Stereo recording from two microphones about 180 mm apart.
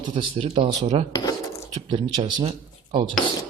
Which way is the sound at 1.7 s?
25° right (ahead or behind).